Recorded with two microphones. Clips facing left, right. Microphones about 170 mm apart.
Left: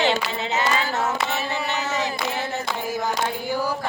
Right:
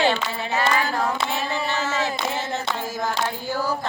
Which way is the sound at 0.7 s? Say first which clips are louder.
Right 1 dB; 25° left (ahead or behind).